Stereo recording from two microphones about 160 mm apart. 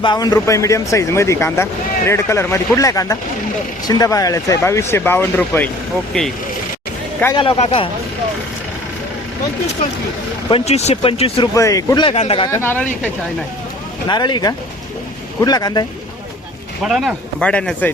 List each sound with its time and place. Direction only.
0.0 s speech: 25° left (ahead or behind); by 6.3 s 5° left (ahead or behind)
7.3 s speech: 35° left (ahead or behind)
10.5 s speech: 40° left (ahead or behind)
11.5 s speech: 20° left (ahead or behind)
12.0 s speech: 40° left (ahead or behind)
12.5 s speech: 15° left (ahead or behind)
14.1 s speech: 25° left (ahead or behind)
16.8 s speech: centre (ahead or behind)